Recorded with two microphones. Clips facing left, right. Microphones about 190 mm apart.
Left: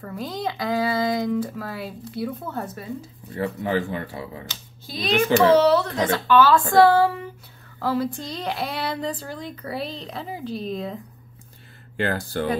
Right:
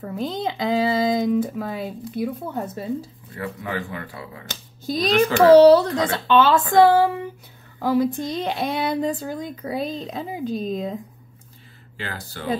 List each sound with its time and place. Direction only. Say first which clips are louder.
0.0 s speech: right 3 dB; 20° right (ahead or behind)
3.3 s speech: left 5 dB; 30° left (ahead or behind)
4.5 s speech: right 10 dB; 45° right (ahead or behind); by 11.0 s 20° right (ahead or behind)
12.0 s speech: left 9 dB; 55° left (ahead or behind)